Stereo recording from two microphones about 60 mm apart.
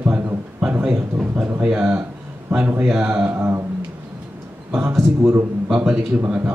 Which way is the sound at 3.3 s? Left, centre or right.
Right.